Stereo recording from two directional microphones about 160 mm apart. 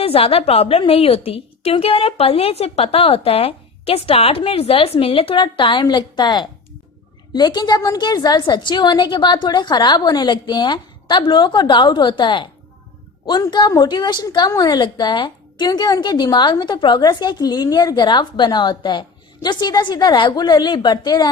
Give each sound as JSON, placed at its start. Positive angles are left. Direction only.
{"t": 0.0, "sound": "a woman's voice", "side_deg": 35}